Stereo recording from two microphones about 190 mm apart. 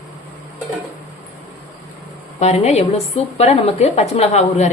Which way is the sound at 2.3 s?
35° left (ahead or behind).